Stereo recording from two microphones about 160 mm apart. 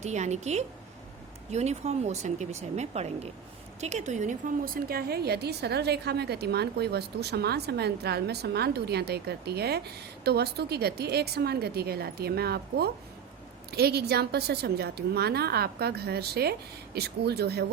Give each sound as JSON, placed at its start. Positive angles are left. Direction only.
{"t": 0.0, "sound": "a woman's voice", "side_deg": -45}